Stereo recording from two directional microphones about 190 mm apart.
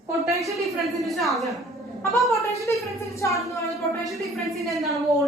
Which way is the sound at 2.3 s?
15° left (ahead or behind).